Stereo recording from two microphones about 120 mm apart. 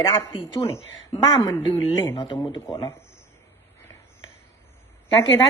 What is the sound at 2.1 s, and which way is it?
Speech, 40° left (ahead or behind).